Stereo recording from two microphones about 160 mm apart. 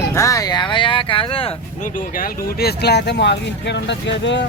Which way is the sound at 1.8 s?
60° left (ahead or behind).